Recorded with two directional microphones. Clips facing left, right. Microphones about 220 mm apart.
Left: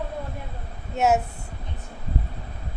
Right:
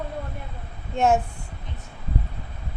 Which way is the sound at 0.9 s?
5° left (ahead or behind).